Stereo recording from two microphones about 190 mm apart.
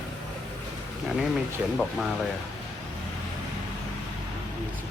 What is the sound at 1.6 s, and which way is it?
Speech, 10° right (ahead or behind).